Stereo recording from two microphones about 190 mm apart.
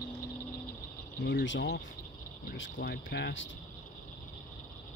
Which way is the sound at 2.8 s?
60° left (ahead or behind).